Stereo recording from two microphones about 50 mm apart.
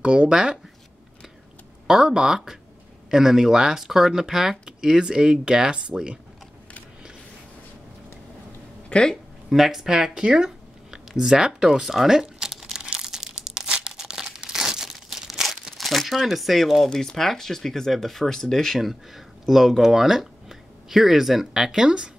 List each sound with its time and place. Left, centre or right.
0.0 s speech: centre
1.9 s speech: centre
8.8 s a sound: left
9.1 s speech: centre
12.7 s crumpling: centre
15.7 s speech: centre
18.8 s speech: centre